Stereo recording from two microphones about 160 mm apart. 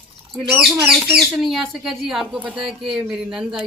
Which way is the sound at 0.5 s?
5° right (ahead or behind).